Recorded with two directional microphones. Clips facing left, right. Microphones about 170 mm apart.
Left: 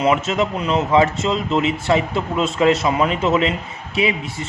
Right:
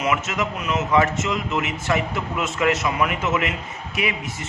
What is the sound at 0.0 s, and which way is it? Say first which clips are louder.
A man's voice: left 6 dB; 30° left (ahead or behind).